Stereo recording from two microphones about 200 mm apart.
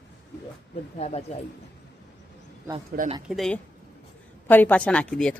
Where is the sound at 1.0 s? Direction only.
30° left (ahead or behind).